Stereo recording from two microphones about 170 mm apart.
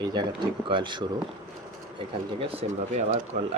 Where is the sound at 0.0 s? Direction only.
25° right (ahead or behind).